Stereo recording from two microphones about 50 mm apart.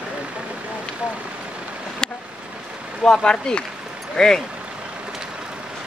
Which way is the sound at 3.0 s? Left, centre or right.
Centre.